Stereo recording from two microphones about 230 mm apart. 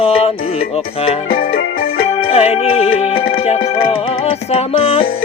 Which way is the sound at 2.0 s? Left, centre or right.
Left.